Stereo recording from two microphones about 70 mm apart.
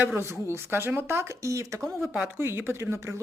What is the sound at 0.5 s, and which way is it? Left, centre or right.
Speech, right.